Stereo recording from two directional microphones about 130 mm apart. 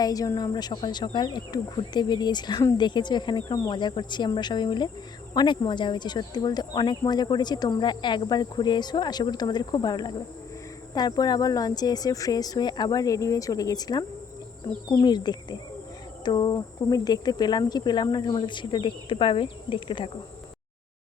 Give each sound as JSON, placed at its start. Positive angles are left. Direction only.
{"t": 0.0, "sound": "speech", "side_deg": 25}